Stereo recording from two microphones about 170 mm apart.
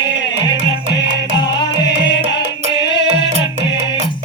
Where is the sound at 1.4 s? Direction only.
25° left (ahead or behind).